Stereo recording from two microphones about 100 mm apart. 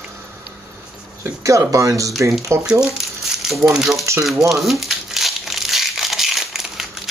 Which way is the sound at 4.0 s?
30° right (ahead or behind).